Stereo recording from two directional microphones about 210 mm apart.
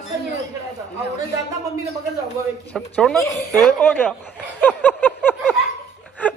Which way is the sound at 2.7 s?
5° left (ahead or behind).